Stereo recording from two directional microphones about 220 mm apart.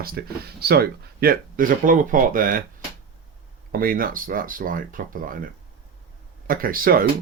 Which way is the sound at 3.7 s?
40° right (ahead or behind).